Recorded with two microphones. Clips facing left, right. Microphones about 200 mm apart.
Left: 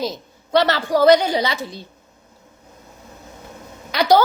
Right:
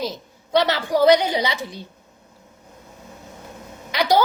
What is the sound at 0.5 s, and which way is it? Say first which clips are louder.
A woman's voice: left 2 dB; 15° right (ahead or behind).